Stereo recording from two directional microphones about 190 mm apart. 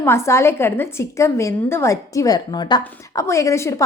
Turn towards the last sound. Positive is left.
turn(degrees=15)  # may be behind; listen again after turning